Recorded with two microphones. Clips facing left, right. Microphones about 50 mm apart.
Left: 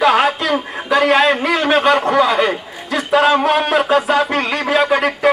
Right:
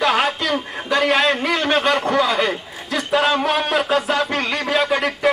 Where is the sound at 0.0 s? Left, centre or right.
Centre.